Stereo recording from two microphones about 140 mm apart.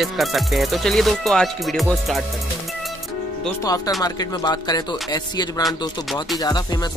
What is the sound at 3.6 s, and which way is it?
Speech, 25° left (ahead or behind).